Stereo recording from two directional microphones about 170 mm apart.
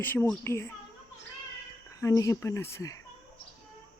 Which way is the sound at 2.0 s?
20° left (ahead or behind).